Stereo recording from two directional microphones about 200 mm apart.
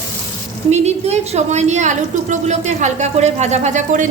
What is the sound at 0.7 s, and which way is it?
A woman's voice, 35° right (ahead or behind).